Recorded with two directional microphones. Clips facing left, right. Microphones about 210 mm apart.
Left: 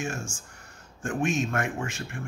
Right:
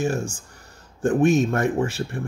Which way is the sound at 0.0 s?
35° right (ahead or behind).